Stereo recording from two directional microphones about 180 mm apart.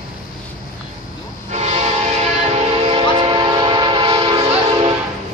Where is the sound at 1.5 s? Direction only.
40° right (ahead or behind).